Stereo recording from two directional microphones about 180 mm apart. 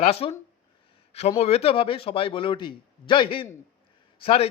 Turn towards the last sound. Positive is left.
turn(degrees=30)  # may be behind; listen again after turning